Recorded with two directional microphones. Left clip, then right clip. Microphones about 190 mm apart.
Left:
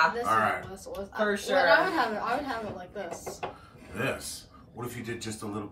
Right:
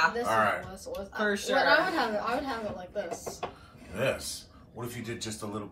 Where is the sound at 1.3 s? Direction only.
20° left (ahead or behind).